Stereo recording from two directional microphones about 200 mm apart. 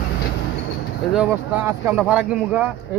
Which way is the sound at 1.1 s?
10° right (ahead or behind).